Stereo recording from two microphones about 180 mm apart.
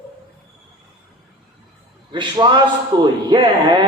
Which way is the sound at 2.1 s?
25° right (ahead or behind).